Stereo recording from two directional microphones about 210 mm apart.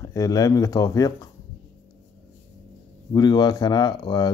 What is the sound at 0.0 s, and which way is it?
Speech, 15° left (ahead or behind).